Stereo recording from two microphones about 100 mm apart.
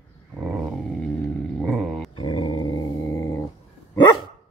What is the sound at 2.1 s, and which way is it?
Growling, 55° left (ahead or behind).